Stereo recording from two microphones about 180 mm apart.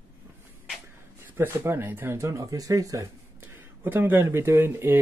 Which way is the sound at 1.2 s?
15° right (ahead or behind).